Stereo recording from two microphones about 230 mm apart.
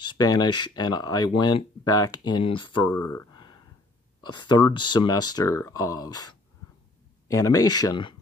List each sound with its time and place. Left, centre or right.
0.2 s speech: centre